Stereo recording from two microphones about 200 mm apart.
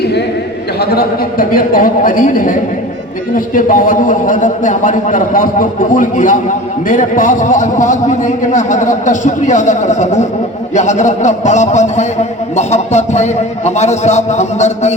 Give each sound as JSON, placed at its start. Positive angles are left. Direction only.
{"t": 0.8, "sound": "a man's voice", "side_deg": 50}